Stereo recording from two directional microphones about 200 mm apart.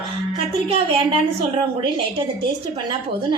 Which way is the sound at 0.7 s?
25° right (ahead or behind).